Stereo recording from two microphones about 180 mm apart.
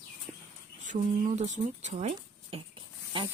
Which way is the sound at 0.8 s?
40° right (ahead or behind).